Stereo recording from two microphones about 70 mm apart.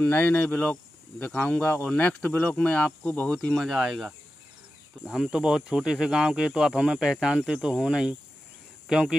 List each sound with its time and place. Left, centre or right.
0.0 s cricket: left
1.9 s cricket: centre
3.5 s speech: centre